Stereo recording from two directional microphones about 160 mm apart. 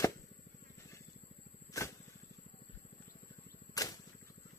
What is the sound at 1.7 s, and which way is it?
Vehicle, 20° left (ahead or behind).